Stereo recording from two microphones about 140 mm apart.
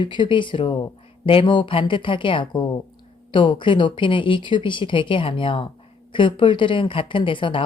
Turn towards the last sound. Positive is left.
turn(degrees=35)  # may be behind; listen again after turning